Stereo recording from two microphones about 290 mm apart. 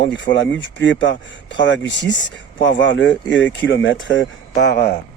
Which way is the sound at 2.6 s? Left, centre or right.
Left.